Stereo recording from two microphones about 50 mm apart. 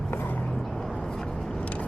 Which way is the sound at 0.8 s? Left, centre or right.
Centre.